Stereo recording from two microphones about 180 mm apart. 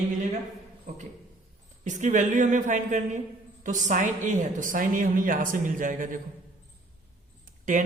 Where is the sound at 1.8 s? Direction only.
45° right (ahead or behind).